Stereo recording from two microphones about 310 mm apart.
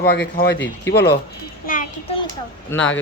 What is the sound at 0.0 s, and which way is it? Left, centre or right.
Speech, left.